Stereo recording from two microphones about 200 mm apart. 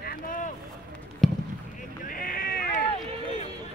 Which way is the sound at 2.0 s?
45° left (ahead or behind).